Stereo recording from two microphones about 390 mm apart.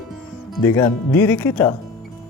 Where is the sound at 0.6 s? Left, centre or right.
Centre.